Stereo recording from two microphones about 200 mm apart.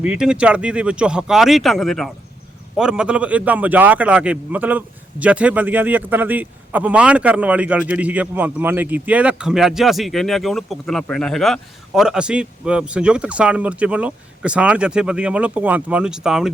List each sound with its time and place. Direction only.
0.0 s a man's voice: 5° right (ahead or behind)